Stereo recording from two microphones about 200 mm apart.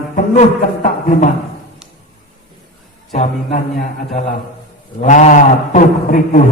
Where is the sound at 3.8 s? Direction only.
40° left (ahead or behind).